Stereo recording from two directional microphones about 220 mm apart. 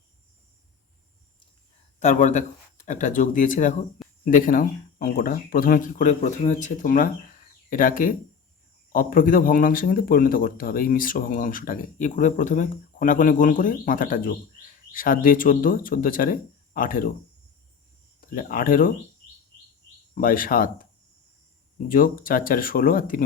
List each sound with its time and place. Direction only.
2.0 s speech: 35° left (ahead or behind)
18.2 s speech: 40° left (ahead or behind)
20.1 s speech: 40° left (ahead or behind)
21.8 s speech: 40° left (ahead or behind)